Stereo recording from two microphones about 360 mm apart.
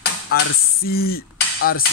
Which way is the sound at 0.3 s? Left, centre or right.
Left.